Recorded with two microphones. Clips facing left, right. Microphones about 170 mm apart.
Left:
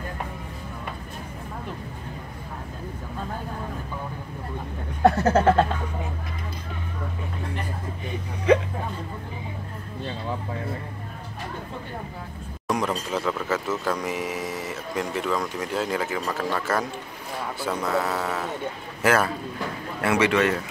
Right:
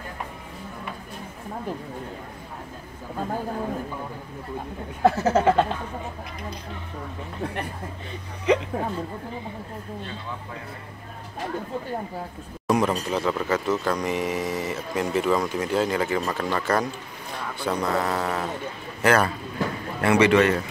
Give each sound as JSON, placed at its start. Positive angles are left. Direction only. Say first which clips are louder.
{"t": 5.0, "sound": "speech", "louder": "left 1 dB", "side_deg": 0}
{"t": 12.6, "sound": "a sound", "louder": "right 4 dB", "side_deg": 0}
{"t": 17.6, "sound": "speech", "louder": "right 1 dB", "side_deg": 5}